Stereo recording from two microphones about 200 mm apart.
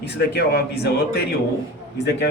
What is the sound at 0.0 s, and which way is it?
A man's voice, 55° left (ahead or behind).